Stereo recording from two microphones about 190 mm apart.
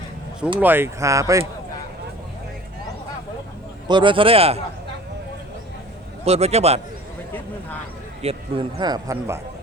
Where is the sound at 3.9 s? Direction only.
25° right (ahead or behind).